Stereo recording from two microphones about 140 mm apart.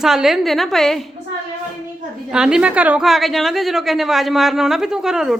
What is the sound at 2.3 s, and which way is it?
A woman's voice, 5° right (ahead or behind).